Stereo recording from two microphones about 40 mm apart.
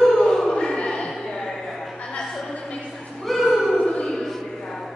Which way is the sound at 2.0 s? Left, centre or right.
Centre.